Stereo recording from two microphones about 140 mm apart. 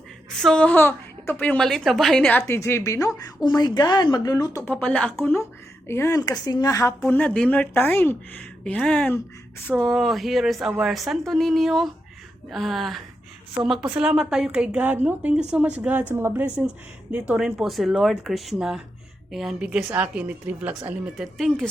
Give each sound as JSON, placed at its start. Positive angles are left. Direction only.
{"t": 0.3, "sound": "speech", "side_deg": 5}
{"t": 2.5, "sound": "speech", "side_deg": 20}
{"t": 4.6, "sound": "a woman's voice", "side_deg": 10}
{"t": 21.3, "sound": "speech", "side_deg": 5}